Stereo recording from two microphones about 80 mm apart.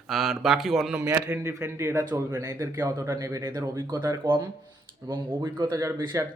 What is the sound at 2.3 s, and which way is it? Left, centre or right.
Speech, right.